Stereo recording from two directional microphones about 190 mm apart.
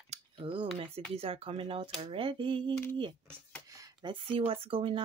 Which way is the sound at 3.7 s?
20° right (ahead or behind).